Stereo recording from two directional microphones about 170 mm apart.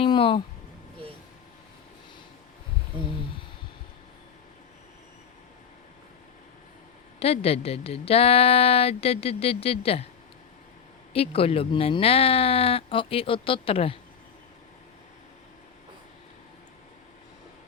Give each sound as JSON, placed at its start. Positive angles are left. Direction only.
{"t": 0.0, "sound": "a sound", "side_deg": 35}
{"t": 7.2, "sound": "a woman's voice", "side_deg": 35}
{"t": 11.1, "sound": "a woman's voice", "side_deg": 35}